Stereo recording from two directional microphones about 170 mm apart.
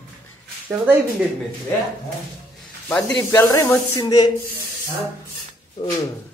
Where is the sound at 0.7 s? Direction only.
10° right (ahead or behind).